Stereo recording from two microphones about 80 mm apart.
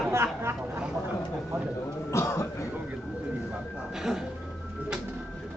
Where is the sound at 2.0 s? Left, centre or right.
Left.